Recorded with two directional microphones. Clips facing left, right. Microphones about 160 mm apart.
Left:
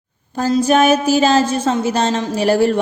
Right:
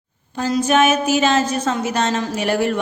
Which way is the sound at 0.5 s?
35° left (ahead or behind).